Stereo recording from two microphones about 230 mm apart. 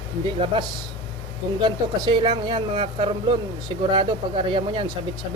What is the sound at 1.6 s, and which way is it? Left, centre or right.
A woman's voice, centre.